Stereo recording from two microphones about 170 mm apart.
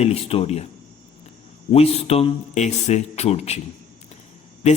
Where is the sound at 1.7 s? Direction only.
35° left (ahead or behind).